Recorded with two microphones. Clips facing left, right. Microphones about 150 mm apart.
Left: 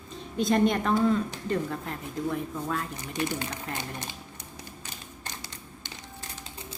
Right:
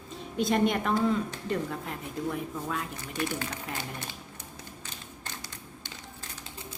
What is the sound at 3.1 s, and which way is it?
Speech, 20° left (ahead or behind).